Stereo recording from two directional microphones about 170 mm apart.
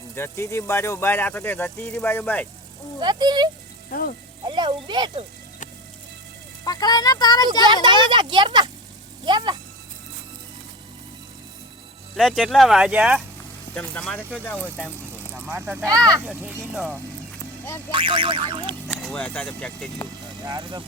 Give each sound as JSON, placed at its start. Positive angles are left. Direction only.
{"t": 0.2, "sound": "speech", "side_deg": 15}
{"t": 3.0, "sound": "speech", "side_deg": -25}
{"t": 6.7, "sound": "speech", "side_deg": 25}
{"t": 7.6, "sound": "speech", "side_deg": -25}
{"t": 12.1, "sound": "speech", "side_deg": 0}
{"t": 13.7, "sound": "speech", "side_deg": 5}
{"t": 15.3, "sound": "speech", "side_deg": -10}
{"t": 17.9, "sound": "a sound", "side_deg": -30}
{"t": 18.9, "sound": "speech", "side_deg": 5}
{"t": 20.4, "sound": "speech", "side_deg": -25}